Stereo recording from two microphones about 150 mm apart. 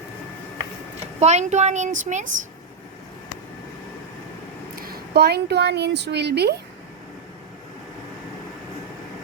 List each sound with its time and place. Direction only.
1.2 s speech: 50° right (ahead or behind)
4.8 s a woman's voice: 85° right